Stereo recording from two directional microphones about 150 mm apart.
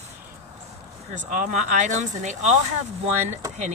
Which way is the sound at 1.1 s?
55° right (ahead or behind).